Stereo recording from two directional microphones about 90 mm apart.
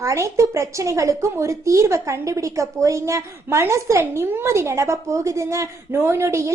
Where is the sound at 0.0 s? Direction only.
35° right (ahead or behind).